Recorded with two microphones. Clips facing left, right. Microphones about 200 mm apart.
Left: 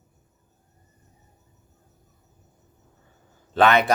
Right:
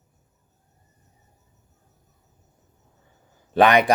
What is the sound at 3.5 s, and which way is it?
Speech, 15° right (ahead or behind).